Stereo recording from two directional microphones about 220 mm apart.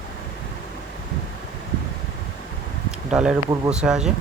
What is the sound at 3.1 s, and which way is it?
Speech, 5° right (ahead or behind).